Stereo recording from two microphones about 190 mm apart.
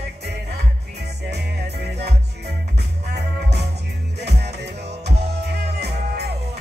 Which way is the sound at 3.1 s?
60° right (ahead or behind).